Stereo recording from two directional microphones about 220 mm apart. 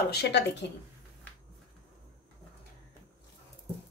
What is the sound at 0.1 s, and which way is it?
Speech, 50° left (ahead or behind).